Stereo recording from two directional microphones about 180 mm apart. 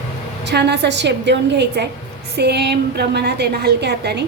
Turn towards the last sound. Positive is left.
turn(degrees=-65)  # may be behind; listen again after turning